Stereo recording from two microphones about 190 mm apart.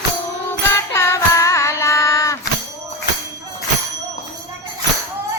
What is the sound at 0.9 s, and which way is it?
Music, 15° left (ahead or behind).